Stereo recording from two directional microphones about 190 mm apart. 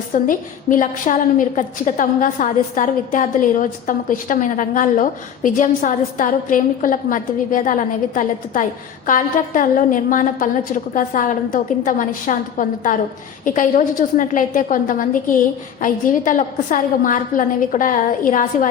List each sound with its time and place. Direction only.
0.1 s a woman's voice: 45° left (ahead or behind)